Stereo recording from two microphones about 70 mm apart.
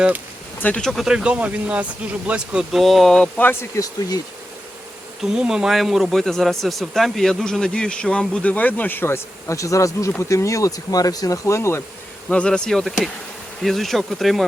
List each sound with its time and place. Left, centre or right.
0.8 s speech: centre
1.0 s speech: centre
2.8 s speech: centre
3.3 s speech: left
5.2 s speech: centre; by 11.8 s left
12.3 s speech: centre
12.8 s speech: centre